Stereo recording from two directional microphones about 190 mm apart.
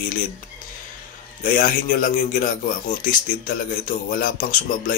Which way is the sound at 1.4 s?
45° left (ahead or behind).